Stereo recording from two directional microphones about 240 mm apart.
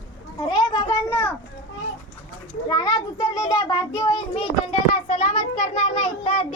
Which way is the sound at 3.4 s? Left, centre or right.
Centre.